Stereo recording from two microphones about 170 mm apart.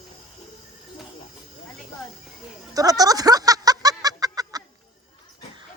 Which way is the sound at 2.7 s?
20° right (ahead or behind).